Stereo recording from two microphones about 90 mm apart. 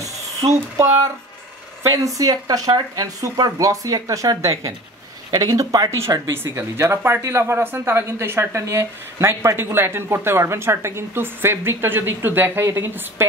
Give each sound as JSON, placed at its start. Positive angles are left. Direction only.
{"t": 0.0, "sound": "a sound", "side_deg": -40}
{"t": 1.9, "sound": "speech", "side_deg": -40}
{"t": 6.0, "sound": "speech", "side_deg": -30}